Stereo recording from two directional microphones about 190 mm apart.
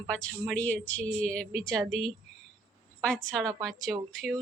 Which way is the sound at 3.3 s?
Centre (ahead or behind).